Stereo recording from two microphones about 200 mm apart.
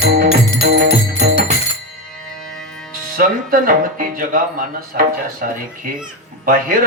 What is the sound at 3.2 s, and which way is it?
Speech, 45° right (ahead or behind).